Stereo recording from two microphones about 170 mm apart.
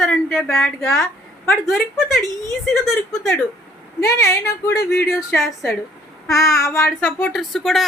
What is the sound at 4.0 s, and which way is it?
Speech, 20° left (ahead or behind).